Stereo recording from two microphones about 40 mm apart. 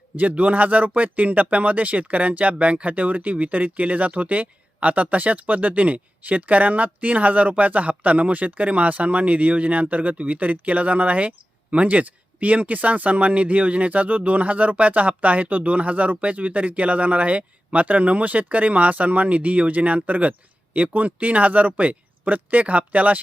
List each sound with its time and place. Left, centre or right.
0.2 s speech: right